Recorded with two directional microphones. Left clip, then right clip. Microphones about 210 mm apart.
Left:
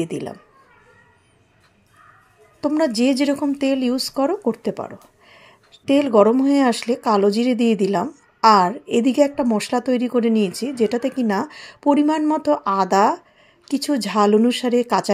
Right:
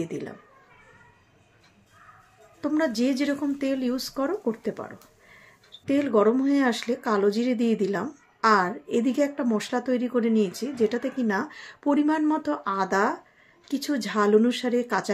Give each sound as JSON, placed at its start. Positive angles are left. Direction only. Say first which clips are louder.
{"t": 0.0, "sound": "a woman's voice", "louder": "left 6 dB", "side_deg": 35}
{"t": 2.6, "sound": "a woman's voice", "louder": "left 6 dB", "side_deg": 30}